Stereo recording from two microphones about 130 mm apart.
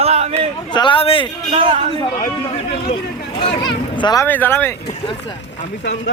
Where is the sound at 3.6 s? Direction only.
35° left (ahead or behind).